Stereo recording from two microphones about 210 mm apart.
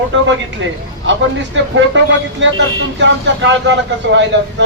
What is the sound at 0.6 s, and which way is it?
Speech, 60° right (ahead or behind).